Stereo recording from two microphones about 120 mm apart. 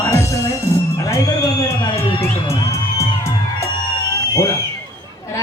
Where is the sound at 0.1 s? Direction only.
20° left (ahead or behind).